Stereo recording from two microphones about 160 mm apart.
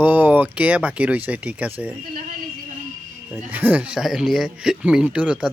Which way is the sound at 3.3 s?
10° right (ahead or behind).